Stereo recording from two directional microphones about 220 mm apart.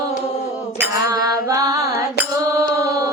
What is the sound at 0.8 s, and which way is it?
Mantra, 15° right (ahead or behind).